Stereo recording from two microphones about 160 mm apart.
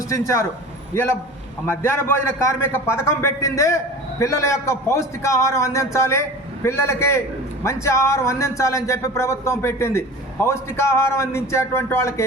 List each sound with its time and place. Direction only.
0.1 s a man's voice: 20° left (ahead or behind)
1.6 s a man's voice: 15° left (ahead or behind)